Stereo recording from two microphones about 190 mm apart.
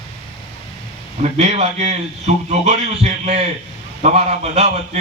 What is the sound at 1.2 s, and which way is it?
A man's voice, 35° right (ahead or behind).